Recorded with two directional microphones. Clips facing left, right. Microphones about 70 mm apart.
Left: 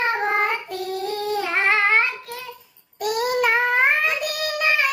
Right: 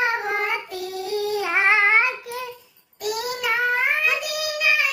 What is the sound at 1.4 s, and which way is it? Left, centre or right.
Child singing, centre.